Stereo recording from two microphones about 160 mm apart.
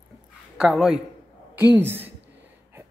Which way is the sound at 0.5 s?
5° right (ahead or behind).